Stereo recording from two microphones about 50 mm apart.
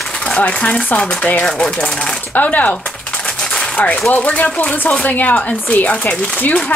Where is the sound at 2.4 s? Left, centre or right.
Left.